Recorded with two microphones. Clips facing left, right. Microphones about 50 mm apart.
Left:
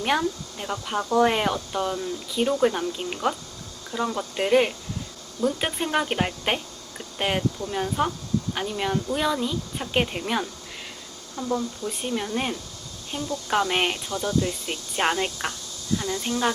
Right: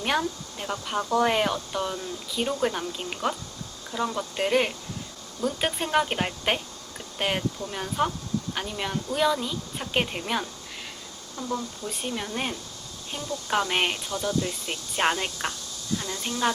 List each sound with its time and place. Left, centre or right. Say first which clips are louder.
0.2 s speech: left 2 dB; centre
11.3 s speech: left 4 dB; centre
11.9 s speech: left 2 dB; centre
13.7 s speech: left 2 dB; centre
14.1 s speech: left 2 dB; left
14.7 s speech: right 3 dB; centre
16.0 s speech: left 7 dB; centre